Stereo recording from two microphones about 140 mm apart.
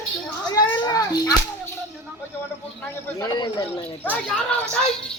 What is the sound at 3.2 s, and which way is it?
Speech, 30° left (ahead or behind).